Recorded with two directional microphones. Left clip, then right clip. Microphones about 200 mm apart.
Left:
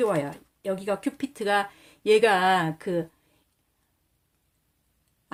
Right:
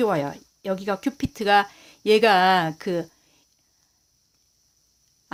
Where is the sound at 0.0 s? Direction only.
40° right (ahead or behind).